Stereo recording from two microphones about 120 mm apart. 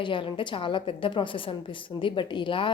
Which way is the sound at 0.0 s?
45° left (ahead or behind).